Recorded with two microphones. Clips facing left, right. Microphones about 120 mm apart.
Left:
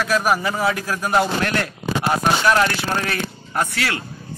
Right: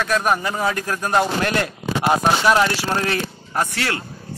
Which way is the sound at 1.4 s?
15° right (ahead or behind).